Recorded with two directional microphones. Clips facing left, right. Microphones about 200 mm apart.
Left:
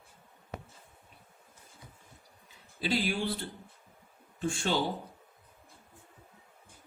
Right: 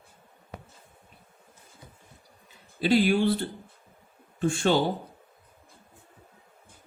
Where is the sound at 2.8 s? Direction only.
65° right (ahead or behind).